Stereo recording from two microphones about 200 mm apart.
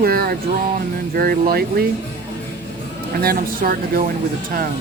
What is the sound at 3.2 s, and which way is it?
Speech, 50° right (ahead or behind).